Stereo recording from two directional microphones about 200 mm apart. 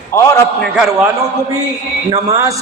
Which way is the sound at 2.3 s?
15° right (ahead or behind).